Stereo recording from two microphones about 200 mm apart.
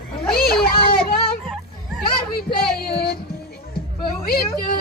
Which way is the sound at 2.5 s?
50° left (ahead or behind).